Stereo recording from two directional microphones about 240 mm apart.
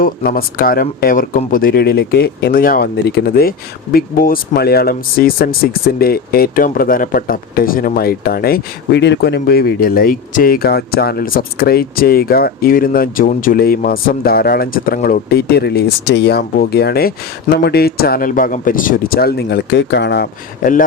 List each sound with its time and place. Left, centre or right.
0.0 s speech: left